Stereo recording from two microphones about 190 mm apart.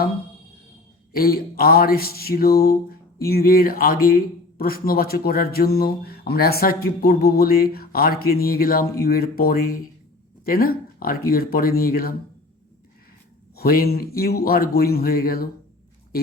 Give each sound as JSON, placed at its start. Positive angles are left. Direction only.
{"t": 1.1, "sound": "a man's voice", "side_deg": 55}
{"t": 13.6, "sound": "a man's voice", "side_deg": 55}